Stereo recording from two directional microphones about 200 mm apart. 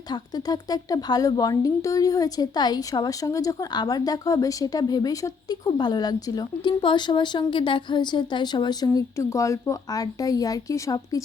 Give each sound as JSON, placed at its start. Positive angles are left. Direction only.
{"t": 0.1, "sound": "a woman's voice", "side_deg": 20}